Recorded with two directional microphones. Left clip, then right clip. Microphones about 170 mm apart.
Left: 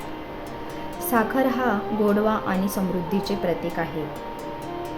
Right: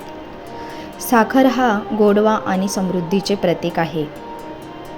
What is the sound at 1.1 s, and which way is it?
A woman's voice, 30° right (ahead or behind).